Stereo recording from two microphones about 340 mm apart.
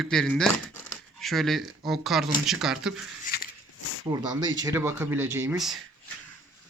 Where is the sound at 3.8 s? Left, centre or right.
Left.